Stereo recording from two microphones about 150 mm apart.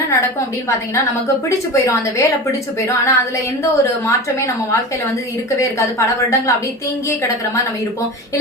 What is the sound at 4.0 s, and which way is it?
A woman's voice, 20° left (ahead or behind).